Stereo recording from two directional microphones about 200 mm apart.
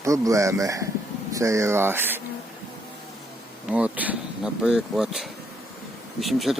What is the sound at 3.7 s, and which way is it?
Speech, 5° right (ahead or behind).